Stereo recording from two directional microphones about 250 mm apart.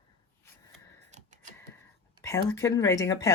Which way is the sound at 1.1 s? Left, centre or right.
Right.